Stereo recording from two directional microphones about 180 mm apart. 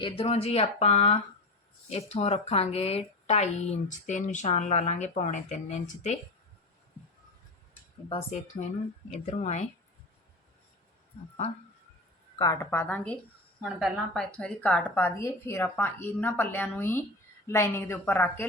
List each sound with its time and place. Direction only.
0.2 s speech: 35° left (ahead or behind)
9.2 s speech: 40° left (ahead or behind)
12.4 s a woman's voice: 20° left (ahead or behind)
12.9 s a woman's voice: 10° left (ahead or behind)
13.6 s a woman's voice: centre (ahead or behind)